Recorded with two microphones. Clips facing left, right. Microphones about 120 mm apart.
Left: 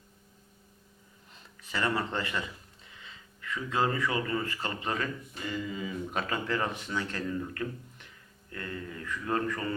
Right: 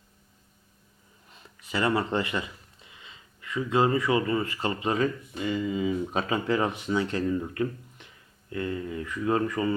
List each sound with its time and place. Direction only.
1.7 s speech: 15° right (ahead or behind)